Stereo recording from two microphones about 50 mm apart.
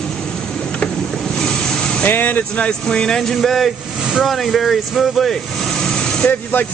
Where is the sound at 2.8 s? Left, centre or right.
Centre.